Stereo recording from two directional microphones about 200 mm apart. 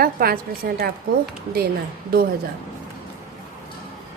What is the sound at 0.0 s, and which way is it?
Speech, 50° right (ahead or behind).